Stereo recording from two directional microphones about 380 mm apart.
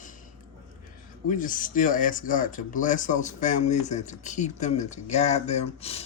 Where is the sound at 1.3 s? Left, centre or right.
Left.